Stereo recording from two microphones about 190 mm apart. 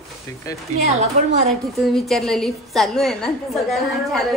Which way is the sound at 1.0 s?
40° right (ahead or behind).